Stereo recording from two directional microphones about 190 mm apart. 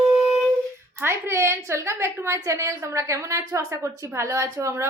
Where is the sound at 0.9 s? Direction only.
15° right (ahead or behind).